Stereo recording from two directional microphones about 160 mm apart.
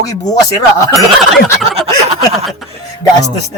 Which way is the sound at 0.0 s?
20° left (ahead or behind).